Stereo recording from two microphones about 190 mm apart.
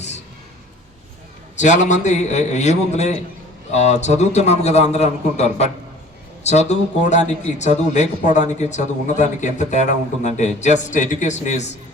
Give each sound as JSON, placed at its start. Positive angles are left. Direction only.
{"t": 1.5, "sound": "a man's voice", "side_deg": 40}